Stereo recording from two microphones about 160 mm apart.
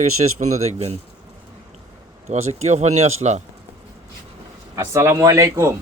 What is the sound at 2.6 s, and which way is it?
Speech, 45° right (ahead or behind).